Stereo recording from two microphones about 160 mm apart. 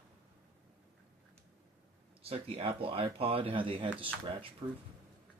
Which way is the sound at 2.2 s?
35° right (ahead or behind).